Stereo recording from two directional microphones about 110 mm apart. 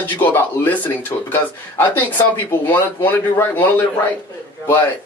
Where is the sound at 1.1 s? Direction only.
35° left (ahead or behind).